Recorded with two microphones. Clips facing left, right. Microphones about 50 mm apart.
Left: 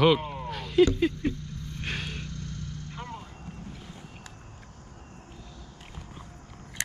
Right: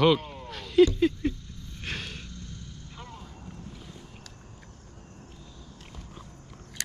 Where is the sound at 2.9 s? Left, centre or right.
Left.